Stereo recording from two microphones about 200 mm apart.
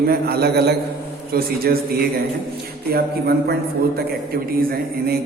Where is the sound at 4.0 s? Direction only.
50° right (ahead or behind).